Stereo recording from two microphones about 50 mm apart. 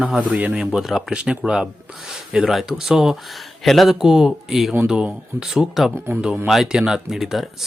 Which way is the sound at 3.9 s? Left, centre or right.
Centre.